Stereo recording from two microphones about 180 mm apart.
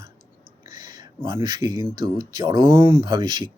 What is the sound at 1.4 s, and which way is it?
Speech, 20° right (ahead or behind).